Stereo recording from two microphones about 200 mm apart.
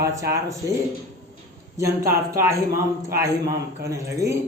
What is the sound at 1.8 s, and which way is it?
Speech, 15° right (ahead or behind).